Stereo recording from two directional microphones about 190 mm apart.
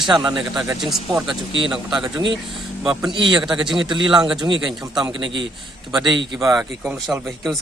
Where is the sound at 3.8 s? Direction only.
25° right (ahead or behind).